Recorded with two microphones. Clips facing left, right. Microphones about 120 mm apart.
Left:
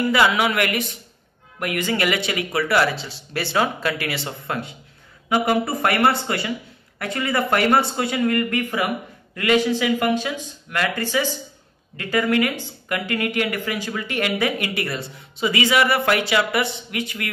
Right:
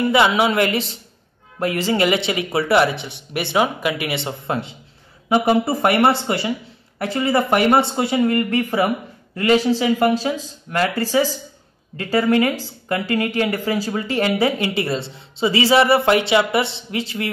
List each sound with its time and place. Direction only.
0.0 s speech: 20° right (ahead or behind)